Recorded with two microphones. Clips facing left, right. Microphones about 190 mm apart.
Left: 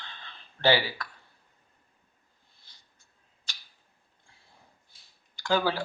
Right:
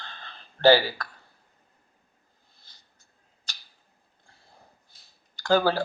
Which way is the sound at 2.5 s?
40° right (ahead or behind).